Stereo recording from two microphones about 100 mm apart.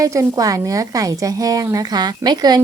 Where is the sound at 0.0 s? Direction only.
35° right (ahead or behind).